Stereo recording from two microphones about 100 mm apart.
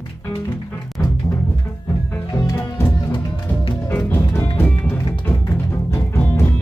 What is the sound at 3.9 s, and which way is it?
Music, 25° left (ahead or behind).